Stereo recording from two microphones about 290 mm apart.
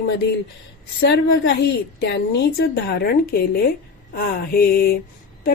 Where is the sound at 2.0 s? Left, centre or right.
Left.